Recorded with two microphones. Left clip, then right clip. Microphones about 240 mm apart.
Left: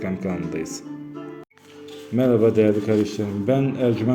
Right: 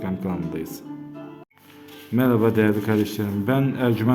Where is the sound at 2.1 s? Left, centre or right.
Centre.